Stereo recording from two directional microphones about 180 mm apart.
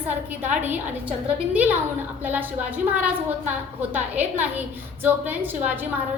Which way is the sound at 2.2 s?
10° right (ahead or behind).